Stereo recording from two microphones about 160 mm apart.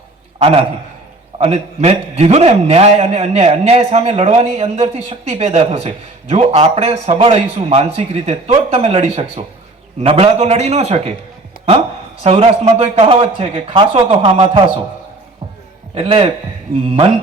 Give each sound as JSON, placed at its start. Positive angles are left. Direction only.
{"t": 0.3, "sound": "a man's voice", "side_deg": -35}
{"t": 12.2, "sound": "a man's voice", "side_deg": -40}
{"t": 16.0, "sound": "a man's voice", "side_deg": -35}